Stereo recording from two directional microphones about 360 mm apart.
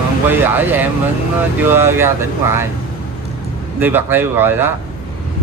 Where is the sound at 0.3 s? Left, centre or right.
Centre.